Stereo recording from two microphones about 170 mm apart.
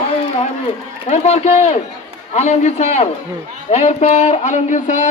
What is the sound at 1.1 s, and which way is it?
A man's voice, 40° left (ahead or behind).